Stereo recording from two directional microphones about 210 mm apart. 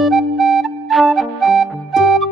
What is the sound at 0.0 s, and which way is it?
Music, centre (ahead or behind).